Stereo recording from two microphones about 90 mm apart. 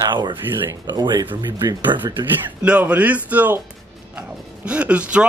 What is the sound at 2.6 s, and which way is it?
Speech, 15° right (ahead or behind).